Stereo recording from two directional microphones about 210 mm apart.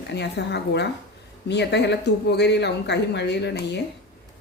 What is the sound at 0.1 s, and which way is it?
Speech, 55° left (ahead or behind).